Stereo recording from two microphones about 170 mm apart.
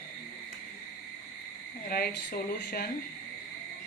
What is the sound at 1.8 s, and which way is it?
Speech, 65° left (ahead or behind).